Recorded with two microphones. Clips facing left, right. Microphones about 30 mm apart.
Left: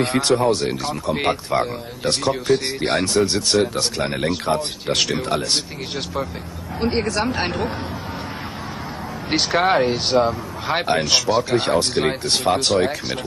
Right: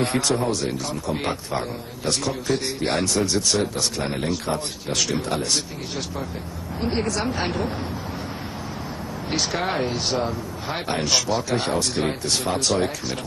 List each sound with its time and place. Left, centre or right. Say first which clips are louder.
0.0 s speech: left 4 dB; left
9.3 s speech: left 7 dB; left
12.1 s speech: left 5 dB; left
12.5 s speech: left 4 dB; left